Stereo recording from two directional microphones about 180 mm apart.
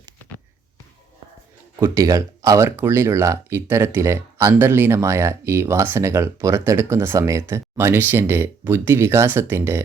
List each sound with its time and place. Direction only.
1.8 s speech: 15° right (ahead or behind)